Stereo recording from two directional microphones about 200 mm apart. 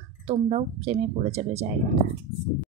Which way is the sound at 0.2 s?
30° right (ahead or behind).